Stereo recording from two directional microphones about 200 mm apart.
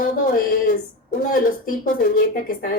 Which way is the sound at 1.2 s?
45° left (ahead or behind).